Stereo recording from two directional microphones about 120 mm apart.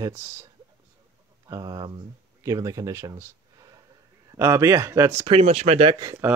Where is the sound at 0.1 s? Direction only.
20° right (ahead or behind).